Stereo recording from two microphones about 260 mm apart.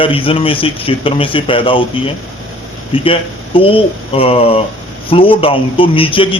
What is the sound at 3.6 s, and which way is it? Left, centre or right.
A man's voice, left.